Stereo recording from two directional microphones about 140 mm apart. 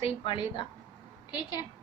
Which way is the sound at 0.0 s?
40° left (ahead or behind).